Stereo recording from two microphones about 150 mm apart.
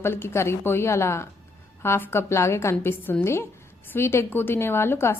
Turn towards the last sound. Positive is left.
turn(degrees=15)  # may be behind; listen again after turning